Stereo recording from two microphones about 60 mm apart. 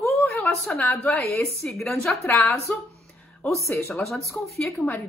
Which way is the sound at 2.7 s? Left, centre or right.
Left.